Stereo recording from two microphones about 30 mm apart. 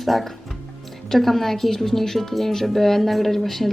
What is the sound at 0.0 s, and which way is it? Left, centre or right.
Speech, centre.